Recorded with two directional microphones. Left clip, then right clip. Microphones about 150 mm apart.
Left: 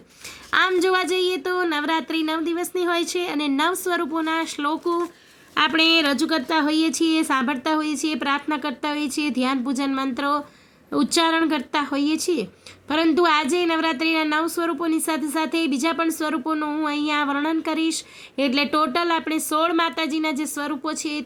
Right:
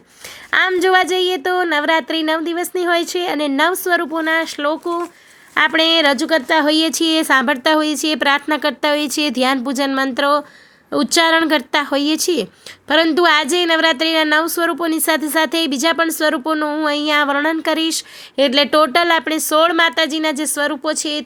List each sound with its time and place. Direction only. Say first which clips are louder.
0.7 s a woman's voice: right 6 dB; 30° right (ahead or behind)
5.5 s a woman's voice: right 4 dB; 40° right (ahead or behind)